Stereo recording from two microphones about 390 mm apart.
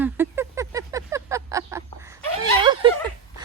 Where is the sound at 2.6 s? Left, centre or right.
Centre.